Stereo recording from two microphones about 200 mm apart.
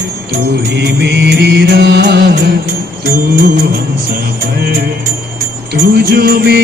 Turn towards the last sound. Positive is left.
turn(degrees=-55)  # may be behind; listen again after turning